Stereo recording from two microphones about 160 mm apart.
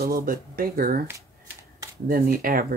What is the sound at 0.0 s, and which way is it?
Speech, 65° right (ahead or behind).